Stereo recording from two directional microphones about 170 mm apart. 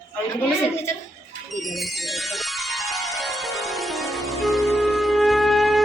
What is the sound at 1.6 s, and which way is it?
Music, centre (ahead or behind).